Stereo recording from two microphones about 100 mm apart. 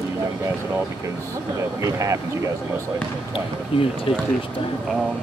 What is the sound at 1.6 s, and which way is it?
Speech, 35° right (ahead or behind).